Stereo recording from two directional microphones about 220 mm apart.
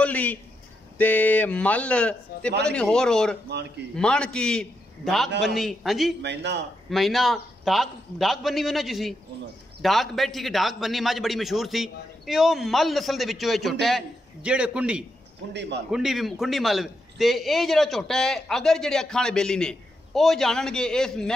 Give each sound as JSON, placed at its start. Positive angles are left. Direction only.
{"t": 0.0, "sound": "a man's voice", "side_deg": 5}
{"t": 6.2, "sound": "a man's voice", "side_deg": -50}
{"t": 6.9, "sound": "a man's voice", "side_deg": 0}
{"t": 15.5, "sound": "a man's voice", "side_deg": -50}
{"t": 15.9, "sound": "a man's voice", "side_deg": 0}